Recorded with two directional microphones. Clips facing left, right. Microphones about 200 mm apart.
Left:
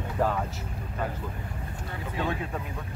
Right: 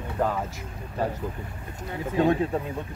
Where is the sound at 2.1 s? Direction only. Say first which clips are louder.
Right 9 dB; 35° right (ahead or behind).